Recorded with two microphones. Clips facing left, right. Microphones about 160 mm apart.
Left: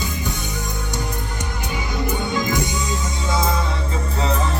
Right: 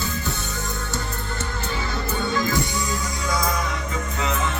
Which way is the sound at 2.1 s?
15° left (ahead or behind).